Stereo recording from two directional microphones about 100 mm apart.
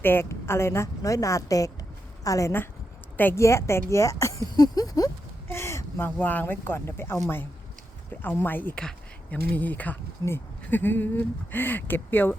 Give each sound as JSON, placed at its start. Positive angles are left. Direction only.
{"t": 0.0, "sound": "a woman's voice", "side_deg": 20}
{"t": 3.2, "sound": "a woman's voice", "side_deg": 20}
{"t": 5.5, "sound": "a sound", "side_deg": 25}
{"t": 6.1, "sound": "speech", "side_deg": 15}
{"t": 8.2, "sound": "speech", "side_deg": 20}